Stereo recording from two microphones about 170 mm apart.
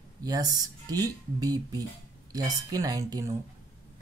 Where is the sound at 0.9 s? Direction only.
20° right (ahead or behind).